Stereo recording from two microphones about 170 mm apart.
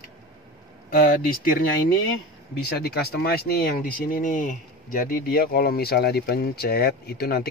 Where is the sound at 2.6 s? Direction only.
65° left (ahead or behind).